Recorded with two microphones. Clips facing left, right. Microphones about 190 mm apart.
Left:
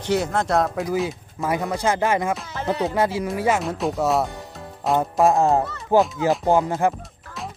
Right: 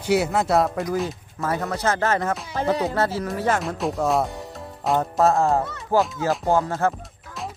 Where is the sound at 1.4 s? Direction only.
15° left (ahead or behind).